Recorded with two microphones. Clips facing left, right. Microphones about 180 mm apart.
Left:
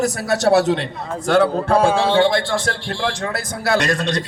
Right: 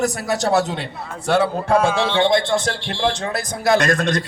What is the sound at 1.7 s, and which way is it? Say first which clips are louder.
Speech: even; 35° left (ahead or behind).